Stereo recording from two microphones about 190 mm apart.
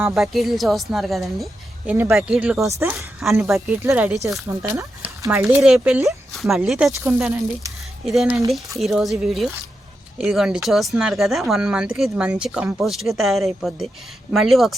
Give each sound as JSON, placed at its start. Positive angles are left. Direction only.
{"t": 0.1, "sound": "speech", "side_deg": 0}
{"t": 1.9, "sound": "speech", "side_deg": -10}
{"t": 2.6, "sound": "speech", "side_deg": -15}
{"t": 3.4, "sound": "speech", "side_deg": 0}
{"t": 5.6, "sound": "speech", "side_deg": -5}
{"t": 8.0, "sound": "speech", "side_deg": 0}